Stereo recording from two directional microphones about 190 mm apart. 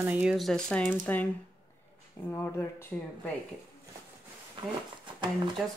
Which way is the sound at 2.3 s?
15° left (ahead or behind).